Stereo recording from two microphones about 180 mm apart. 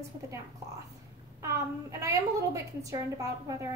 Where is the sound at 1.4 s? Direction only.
15° right (ahead or behind).